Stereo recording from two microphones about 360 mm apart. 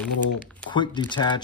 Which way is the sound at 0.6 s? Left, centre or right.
Centre.